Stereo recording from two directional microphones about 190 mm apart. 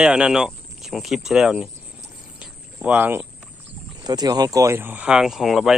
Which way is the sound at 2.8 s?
10° right (ahead or behind).